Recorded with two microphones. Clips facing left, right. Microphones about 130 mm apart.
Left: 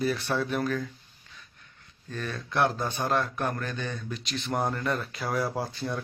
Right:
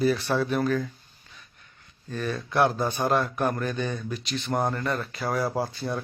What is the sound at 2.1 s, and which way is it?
A man's voice, 10° right (ahead or behind).